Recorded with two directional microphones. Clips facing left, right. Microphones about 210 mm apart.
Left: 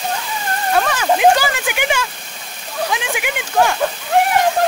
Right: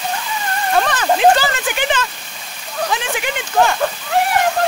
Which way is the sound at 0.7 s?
5° left (ahead or behind).